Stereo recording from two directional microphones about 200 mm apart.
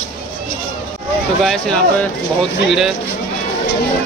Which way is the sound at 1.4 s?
5° left (ahead or behind).